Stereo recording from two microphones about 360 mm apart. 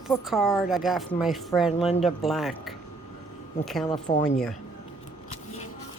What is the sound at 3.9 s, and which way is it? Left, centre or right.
Speech, centre.